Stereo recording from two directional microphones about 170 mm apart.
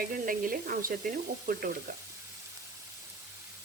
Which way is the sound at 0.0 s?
55° right (ahead or behind).